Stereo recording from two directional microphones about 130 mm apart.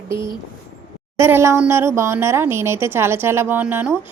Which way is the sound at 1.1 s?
20° right (ahead or behind).